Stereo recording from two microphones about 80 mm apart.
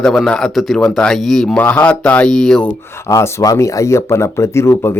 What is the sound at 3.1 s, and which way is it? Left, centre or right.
Speech, left.